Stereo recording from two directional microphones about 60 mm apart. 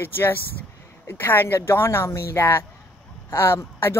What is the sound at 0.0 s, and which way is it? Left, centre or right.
Speech, left.